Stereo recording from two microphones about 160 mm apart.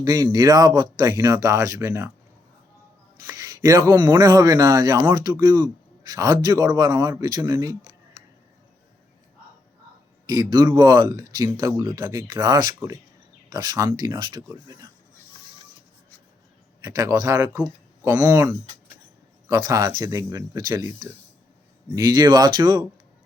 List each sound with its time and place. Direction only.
0.0 s speech: 25° right (ahead or behind)
3.2 s a sound: 25° right (ahead or behind)
4.1 s speech: 20° right (ahead or behind)
10.2 s speech: 25° right (ahead or behind)
16.8 s speech: 20° right (ahead or behind)